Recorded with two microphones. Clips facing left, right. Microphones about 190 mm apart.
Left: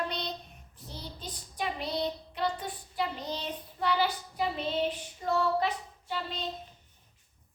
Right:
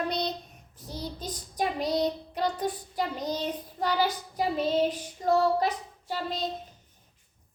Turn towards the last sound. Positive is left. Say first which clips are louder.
# right 4 dB
turn(degrees=-40)  # may be behind; listen again after turning